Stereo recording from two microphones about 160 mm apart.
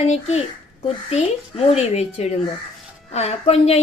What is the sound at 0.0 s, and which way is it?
A woman's voice, 40° left (ahead or behind).